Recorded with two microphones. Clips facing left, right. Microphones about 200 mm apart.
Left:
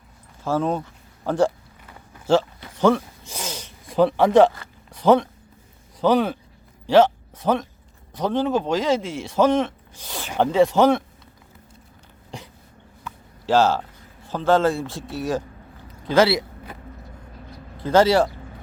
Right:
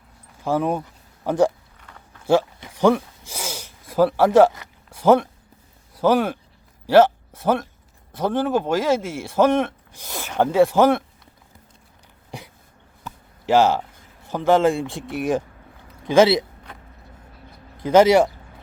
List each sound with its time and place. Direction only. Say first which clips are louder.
0.4 s speech: right 1 dB; 15° right (ahead or behind)
2.2 s a sound: right 1 dB; 10° right (ahead or behind)
4.9 s speech: right 1 dB; 10° right (ahead or behind)
13.4 s speech: right 1 dB; 15° right (ahead or behind)
17.8 s speech: right 3 dB; 20° right (ahead or behind)